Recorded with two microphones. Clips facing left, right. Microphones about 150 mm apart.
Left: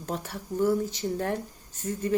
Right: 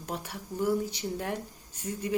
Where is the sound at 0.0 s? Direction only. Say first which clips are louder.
Left 3 dB; 10° right (ahead or behind).